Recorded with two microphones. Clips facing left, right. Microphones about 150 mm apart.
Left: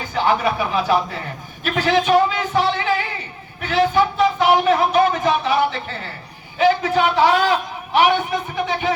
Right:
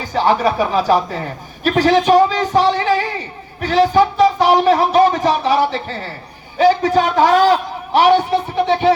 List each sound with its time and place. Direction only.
0.1 s a man's voice: 40° right (ahead or behind)